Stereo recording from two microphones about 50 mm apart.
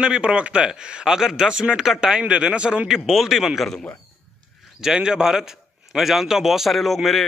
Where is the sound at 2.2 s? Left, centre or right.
Right.